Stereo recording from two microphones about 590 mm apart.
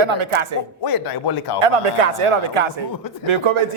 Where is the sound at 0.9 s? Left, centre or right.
Left.